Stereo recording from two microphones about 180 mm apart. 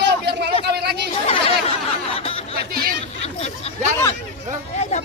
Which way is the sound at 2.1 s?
30° left (ahead or behind).